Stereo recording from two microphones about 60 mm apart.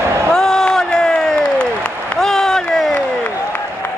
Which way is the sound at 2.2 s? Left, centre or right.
Centre.